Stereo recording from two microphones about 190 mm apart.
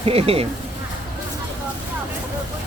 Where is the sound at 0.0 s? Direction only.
30° right (ahead or behind).